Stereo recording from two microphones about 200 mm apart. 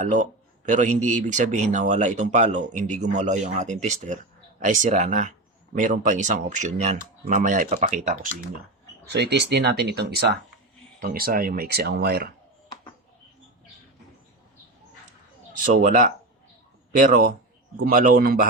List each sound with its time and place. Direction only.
0.0 s speech: 40° right (ahead or behind)
9.0 s speech: 55° right (ahead or behind)
15.5 s speech: 40° right (ahead or behind)